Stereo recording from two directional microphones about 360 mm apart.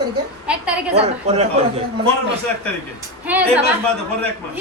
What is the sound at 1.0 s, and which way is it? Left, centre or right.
Speech, centre.